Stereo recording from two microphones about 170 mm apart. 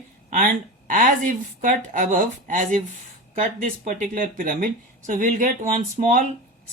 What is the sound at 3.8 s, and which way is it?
Speech, 50° right (ahead or behind).